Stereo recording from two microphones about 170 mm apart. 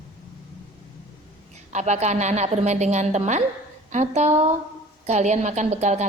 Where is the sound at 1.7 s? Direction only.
45° right (ahead or behind).